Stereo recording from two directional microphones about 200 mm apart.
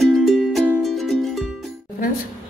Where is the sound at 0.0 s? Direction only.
Centre (ahead or behind).